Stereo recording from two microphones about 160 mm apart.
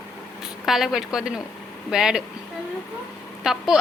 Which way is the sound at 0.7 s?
Centre (ahead or behind).